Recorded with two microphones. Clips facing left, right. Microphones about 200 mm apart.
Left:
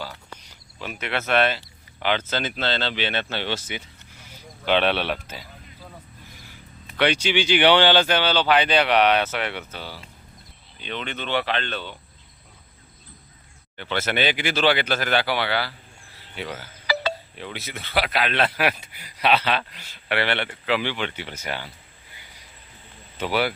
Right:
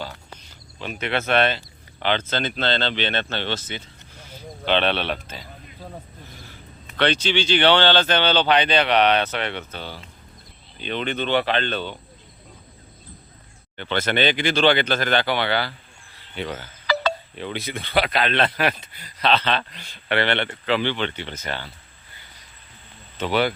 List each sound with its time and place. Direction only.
0.8 s speech: 5° left (ahead or behind)
1.0 s speech: 30° right (ahead or behind)
1.4 s speech: 5° left (ahead or behind)
6.9 s speech: 10° left (ahead or behind)
10.8 s speech: 40° right (ahead or behind)
11.3 s speech: 5° left (ahead or behind)
13.7 s speech: 5° left (ahead or behind)
23.1 s speech: 10° left (ahead or behind)